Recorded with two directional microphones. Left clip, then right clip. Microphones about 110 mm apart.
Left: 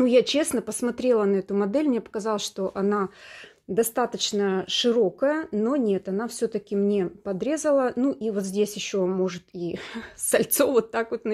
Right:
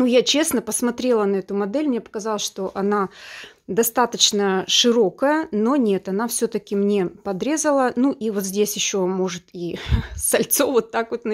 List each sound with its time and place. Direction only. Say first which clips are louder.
0.0 s speech: right 3 dB; 20° right (ahead or behind)